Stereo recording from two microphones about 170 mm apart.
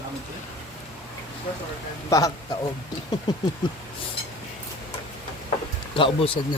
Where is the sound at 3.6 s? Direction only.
25° left (ahead or behind).